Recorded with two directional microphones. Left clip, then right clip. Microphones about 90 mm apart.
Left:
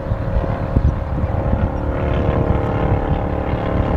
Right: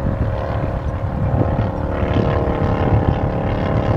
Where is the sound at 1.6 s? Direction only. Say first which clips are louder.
Right 1 dB; 35° right (ahead or behind).